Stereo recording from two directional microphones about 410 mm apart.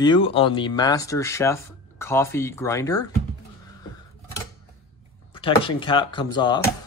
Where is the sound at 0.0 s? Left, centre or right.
Centre.